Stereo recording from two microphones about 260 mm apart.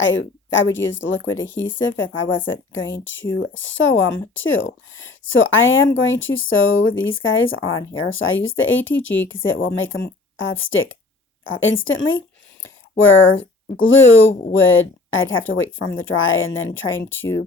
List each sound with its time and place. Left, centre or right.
0.0 s speech: left